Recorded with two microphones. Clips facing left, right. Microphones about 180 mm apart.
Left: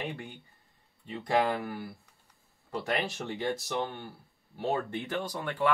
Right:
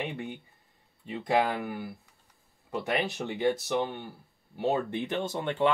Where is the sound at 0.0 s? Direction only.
15° right (ahead or behind).